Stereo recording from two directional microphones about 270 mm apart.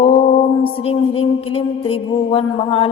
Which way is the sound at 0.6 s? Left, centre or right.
Left.